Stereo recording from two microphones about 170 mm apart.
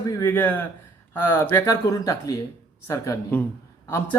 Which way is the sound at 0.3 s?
10° left (ahead or behind).